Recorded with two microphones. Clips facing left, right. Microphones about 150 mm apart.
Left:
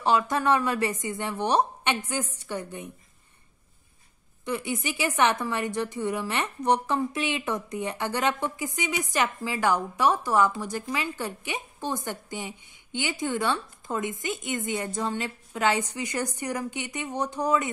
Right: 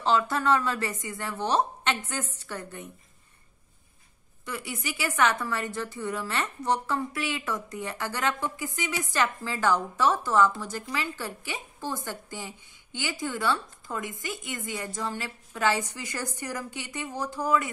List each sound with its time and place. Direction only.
0.0 s speech: 15° left (ahead or behind)
4.5 s a woman's voice: 20° left (ahead or behind)